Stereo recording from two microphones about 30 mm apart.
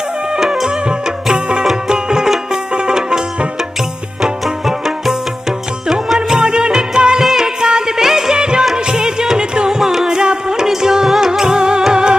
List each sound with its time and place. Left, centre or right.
0.3 s music: right
4.2 s music: centre
6.2 s music of bollywood: right
7.2 s music: centre
9.7 s music: centre